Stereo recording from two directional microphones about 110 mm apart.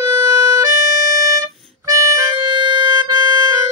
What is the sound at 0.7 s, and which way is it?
Music, 30° right (ahead or behind).